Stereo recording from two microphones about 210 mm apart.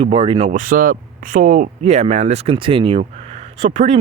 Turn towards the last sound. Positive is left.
turn(degrees=-30)  # may be behind; listen again after turning